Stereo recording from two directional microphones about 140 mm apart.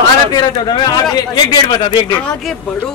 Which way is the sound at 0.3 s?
30° left (ahead or behind).